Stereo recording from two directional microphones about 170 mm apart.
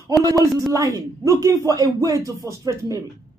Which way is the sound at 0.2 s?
20° right (ahead or behind).